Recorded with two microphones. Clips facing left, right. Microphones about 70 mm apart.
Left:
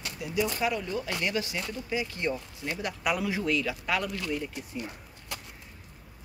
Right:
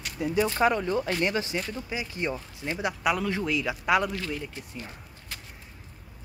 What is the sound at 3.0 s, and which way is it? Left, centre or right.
Speech, centre.